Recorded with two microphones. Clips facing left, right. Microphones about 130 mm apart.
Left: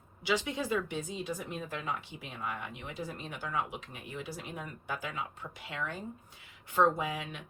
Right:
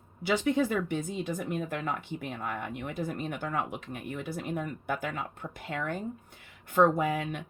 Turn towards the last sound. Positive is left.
turn(degrees=-50)  # may be behind; listen again after turning